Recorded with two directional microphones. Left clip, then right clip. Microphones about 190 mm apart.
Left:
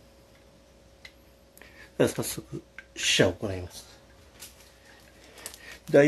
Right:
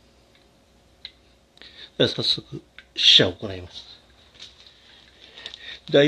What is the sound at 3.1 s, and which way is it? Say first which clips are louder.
Speech: right 6 dB; 20° right (ahead or behind).